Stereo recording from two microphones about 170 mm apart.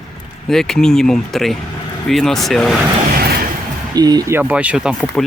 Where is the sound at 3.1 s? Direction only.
60° right (ahead or behind).